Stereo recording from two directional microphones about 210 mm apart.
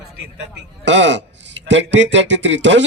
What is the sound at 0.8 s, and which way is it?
A man's voice, 60° right (ahead or behind).